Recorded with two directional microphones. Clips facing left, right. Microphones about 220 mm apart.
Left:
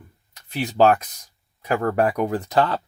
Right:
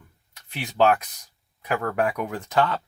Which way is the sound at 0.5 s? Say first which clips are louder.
Left 3 dB; 40° left (ahead or behind).